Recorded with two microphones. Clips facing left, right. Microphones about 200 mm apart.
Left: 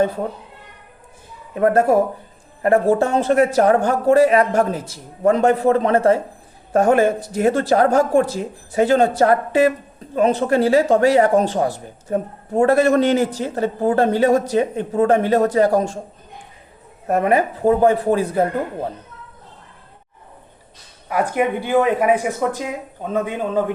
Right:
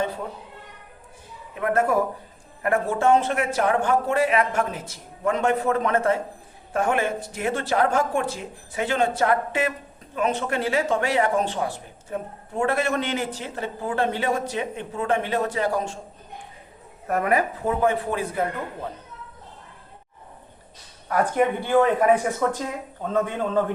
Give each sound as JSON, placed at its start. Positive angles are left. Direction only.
{"t": 1.5, "sound": "speech", "side_deg": 35}
{"t": 17.1, "sound": "speech", "side_deg": 25}
{"t": 21.1, "sound": "speech", "side_deg": 10}